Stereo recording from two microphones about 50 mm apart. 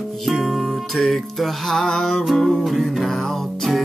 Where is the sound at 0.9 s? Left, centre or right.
Centre.